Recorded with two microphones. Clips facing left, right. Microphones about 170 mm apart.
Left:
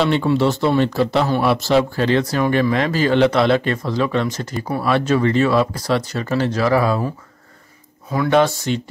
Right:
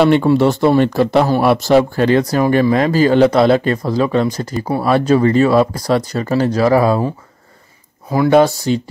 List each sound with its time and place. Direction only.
0.0 s speech: 50° right (ahead or behind)
8.1 s speech: 35° right (ahead or behind)